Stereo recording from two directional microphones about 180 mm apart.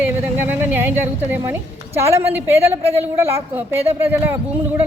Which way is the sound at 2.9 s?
35° right (ahead or behind).